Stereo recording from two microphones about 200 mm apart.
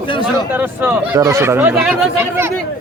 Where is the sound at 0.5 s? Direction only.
10° right (ahead or behind).